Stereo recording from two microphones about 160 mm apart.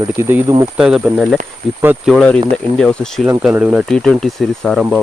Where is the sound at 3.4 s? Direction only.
10° right (ahead or behind).